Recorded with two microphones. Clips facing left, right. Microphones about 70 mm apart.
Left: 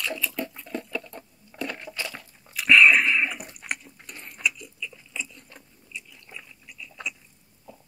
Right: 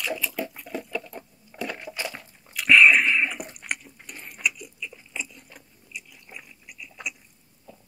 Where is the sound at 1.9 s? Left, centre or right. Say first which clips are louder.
Right 1 dB; centre.